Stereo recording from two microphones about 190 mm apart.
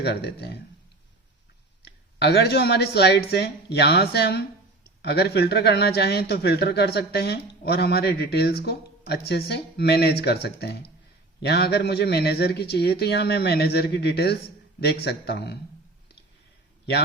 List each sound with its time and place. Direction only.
0.0 s a man's voice: 60° left (ahead or behind)
1.8 s a man's voice: 60° left (ahead or behind)